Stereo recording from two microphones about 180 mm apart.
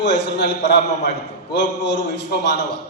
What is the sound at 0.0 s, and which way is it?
A man's voice, 70° left (ahead or behind).